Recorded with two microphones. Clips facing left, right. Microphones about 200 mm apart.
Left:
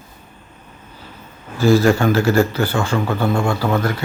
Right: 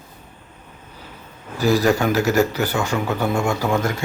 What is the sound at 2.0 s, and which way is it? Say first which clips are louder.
A man's voice: left 2 dB; 10° right (ahead or behind).